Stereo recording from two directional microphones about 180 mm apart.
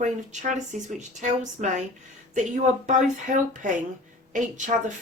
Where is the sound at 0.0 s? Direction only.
40° right (ahead or behind).